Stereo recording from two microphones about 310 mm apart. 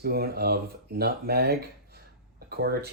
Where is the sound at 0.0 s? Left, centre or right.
Right.